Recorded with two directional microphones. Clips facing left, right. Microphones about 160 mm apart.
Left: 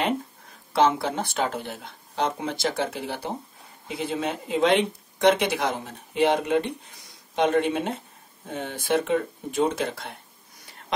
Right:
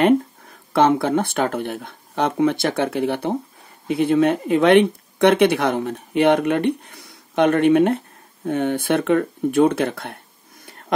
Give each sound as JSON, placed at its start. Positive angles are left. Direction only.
{"t": 0.7, "sound": "speech", "side_deg": -55}